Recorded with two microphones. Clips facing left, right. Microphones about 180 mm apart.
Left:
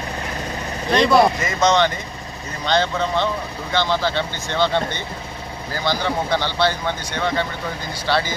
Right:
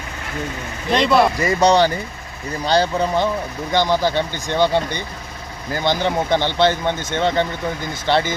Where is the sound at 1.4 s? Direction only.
35° right (ahead or behind).